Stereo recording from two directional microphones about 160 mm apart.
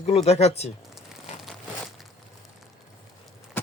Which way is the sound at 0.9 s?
Centre (ahead or behind).